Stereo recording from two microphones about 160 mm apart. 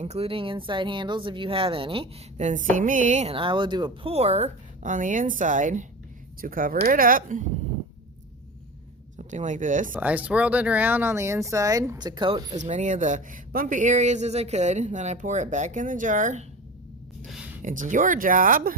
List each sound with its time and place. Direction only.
0.0 s speech: 40° right (ahead or behind)
2.4 s speech: 50° right (ahead or behind)
6.4 s speech: 60° right (ahead or behind)
9.1 s speech: 50° right (ahead or behind)
10.0 s speech: 10° right (ahead or behind); by 16.5 s 50° right (ahead or behind)
17.6 s speech: 55° right (ahead or behind)